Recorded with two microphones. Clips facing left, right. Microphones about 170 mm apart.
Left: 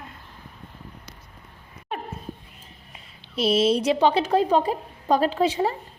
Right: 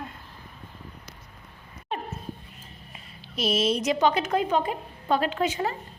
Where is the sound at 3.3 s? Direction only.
30° left (ahead or behind).